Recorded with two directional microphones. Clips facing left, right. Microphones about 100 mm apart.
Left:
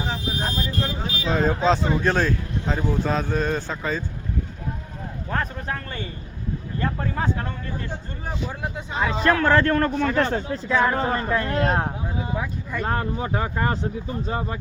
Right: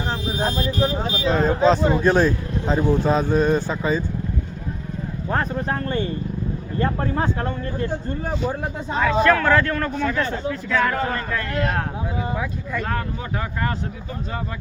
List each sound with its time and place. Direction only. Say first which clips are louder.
1.2 s speech: right 3 dB; centre (ahead or behind)
2.0 s speech: right 4 dB; 15° right (ahead or behind)
5.3 s speech: right 4 dB; 30° right (ahead or behind)
9.0 s speech: right 3 dB; 30° left (ahead or behind)
10.7 s speech: left 1 dB; 20° left (ahead or behind)